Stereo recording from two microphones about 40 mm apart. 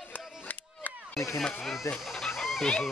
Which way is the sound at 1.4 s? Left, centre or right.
Centre.